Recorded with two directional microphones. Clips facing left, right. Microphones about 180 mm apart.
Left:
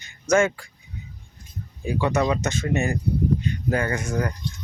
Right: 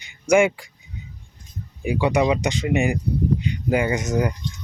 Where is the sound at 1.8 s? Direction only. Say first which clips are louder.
Right 3 dB; 15° right (ahead or behind).